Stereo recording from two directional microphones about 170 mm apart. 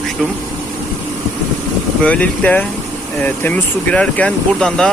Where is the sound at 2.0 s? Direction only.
10° left (ahead or behind).